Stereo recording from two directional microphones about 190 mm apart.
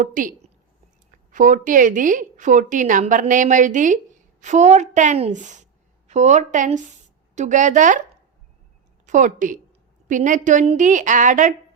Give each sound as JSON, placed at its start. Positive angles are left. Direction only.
{"t": 0.0, "sound": "a woman's voice", "side_deg": -45}
{"t": 9.0, "sound": "a woman's voice", "side_deg": -40}